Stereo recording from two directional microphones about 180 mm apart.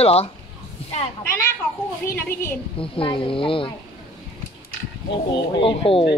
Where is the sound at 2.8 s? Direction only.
30° left (ahead or behind).